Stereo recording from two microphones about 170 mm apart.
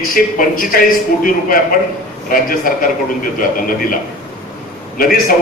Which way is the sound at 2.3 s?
55° left (ahead or behind).